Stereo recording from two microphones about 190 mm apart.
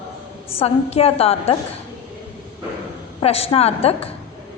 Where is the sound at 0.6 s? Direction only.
30° left (ahead or behind).